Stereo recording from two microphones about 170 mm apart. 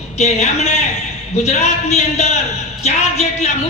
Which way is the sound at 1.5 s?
40° left (ahead or behind).